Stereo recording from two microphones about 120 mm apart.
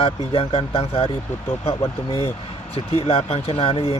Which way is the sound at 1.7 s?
30° left (ahead or behind).